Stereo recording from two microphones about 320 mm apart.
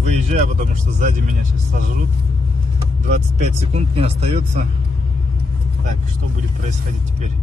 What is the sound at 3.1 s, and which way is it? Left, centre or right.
A man's voice, right.